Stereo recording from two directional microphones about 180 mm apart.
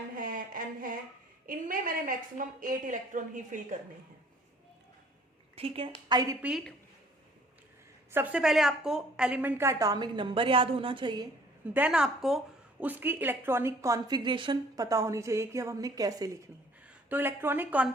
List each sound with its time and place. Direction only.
0.2 s a sound: 50° right (ahead or behind)
1.5 s a woman's voice: 50° right (ahead or behind)
5.5 s a woman's voice: 30° right (ahead or behind)
8.1 s a woman's voice: 10° right (ahead or behind); by 11.3 s 25° right (ahead or behind)
11.7 s a woman's voice: 5° right (ahead or behind)